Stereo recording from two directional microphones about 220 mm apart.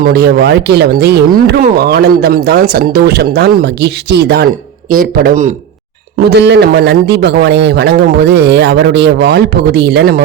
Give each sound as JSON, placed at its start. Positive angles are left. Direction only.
{"t": 0.0, "sound": "speech", "side_deg": -45}
{"t": 6.2, "sound": "speech", "side_deg": -50}